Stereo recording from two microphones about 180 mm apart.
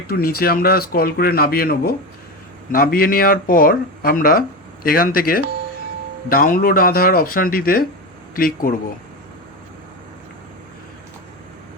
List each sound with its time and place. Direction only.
0.1 s speech: 55° left (ahead or behind)